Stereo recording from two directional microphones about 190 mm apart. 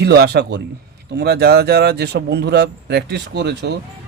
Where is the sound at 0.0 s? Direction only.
60° right (ahead or behind).